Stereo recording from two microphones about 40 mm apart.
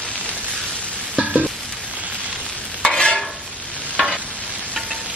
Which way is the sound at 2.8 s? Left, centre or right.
Centre.